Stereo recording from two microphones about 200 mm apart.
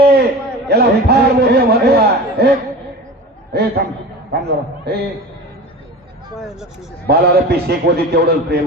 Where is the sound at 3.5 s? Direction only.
50° right (ahead or behind).